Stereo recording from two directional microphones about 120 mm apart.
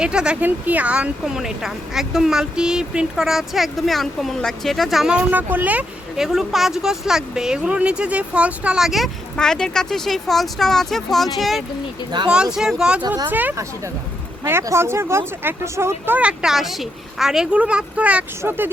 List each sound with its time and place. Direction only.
0.0 s speech: 10° right (ahead or behind)
12.1 s speech: 35° right (ahead or behind)
12.5 s speech: 5° right (ahead or behind)